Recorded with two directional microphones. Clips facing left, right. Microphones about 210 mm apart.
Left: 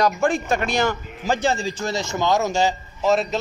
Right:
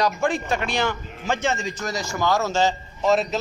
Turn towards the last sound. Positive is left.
turn(degrees=0)  # may be behind; listen again after turning